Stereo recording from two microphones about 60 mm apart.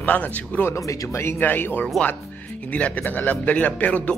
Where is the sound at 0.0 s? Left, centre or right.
Left.